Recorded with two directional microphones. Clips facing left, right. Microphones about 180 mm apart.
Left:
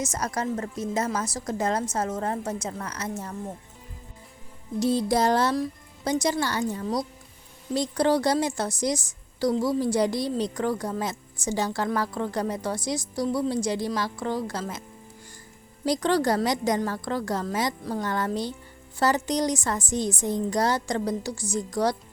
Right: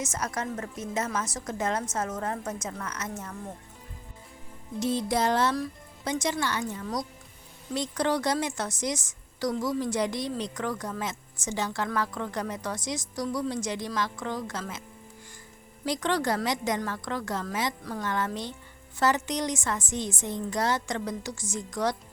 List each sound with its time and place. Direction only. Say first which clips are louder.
0.0 s a woman's voice: left 3 dB; 35° left (ahead or behind)
4.8 s a woman's voice: left 4 dB; 35° left (ahead or behind)